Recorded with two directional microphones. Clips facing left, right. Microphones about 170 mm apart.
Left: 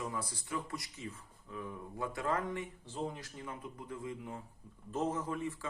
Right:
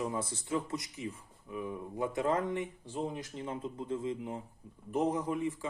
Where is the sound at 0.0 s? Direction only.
25° right (ahead or behind).